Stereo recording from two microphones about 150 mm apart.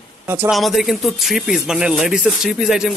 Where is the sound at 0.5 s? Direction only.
Centre (ahead or behind).